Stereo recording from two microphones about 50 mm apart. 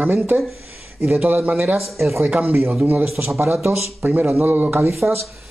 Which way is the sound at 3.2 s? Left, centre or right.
Right.